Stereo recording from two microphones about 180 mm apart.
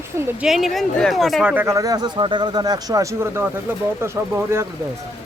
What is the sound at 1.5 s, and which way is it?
Speech, 15° right (ahead or behind).